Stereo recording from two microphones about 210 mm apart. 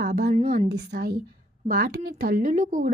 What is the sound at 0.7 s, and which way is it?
Speech, 50° right (ahead or behind).